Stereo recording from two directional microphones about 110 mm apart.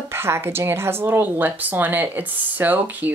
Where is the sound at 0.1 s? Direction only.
20° right (ahead or behind).